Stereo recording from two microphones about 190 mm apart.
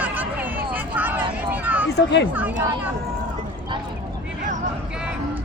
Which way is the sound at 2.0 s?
65° left (ahead or behind).